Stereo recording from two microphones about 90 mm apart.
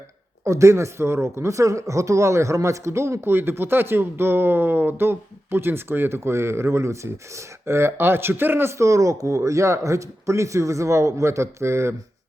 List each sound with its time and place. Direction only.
0.4 s speech: 35° right (ahead or behind)